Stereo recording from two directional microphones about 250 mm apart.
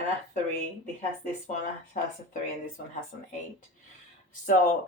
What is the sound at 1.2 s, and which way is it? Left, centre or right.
Speech, left.